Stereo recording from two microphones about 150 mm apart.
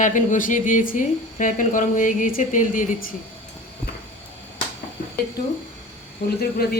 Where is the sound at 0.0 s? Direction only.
60° left (ahead or behind).